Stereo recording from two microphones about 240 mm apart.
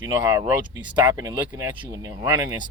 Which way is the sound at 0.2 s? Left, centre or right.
Centre.